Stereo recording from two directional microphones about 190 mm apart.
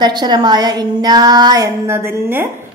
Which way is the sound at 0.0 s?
20° right (ahead or behind).